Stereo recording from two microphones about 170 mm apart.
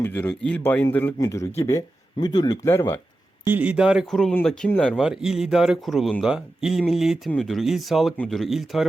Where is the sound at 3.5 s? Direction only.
10° right (ahead or behind); by 5.0 s 5° left (ahead or behind).